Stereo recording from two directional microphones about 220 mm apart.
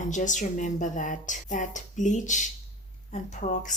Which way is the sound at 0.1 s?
35° left (ahead or behind).